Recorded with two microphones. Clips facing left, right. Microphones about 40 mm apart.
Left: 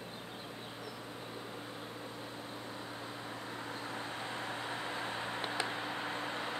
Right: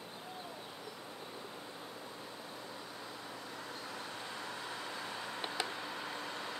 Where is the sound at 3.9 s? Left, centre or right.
Left.